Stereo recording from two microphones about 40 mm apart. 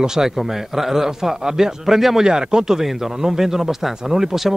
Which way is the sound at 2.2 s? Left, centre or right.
Centre.